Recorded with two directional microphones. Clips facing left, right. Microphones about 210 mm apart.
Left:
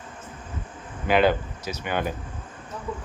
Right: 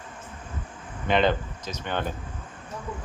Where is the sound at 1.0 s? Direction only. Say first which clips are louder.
Left 2 dB; 5° left (ahead or behind).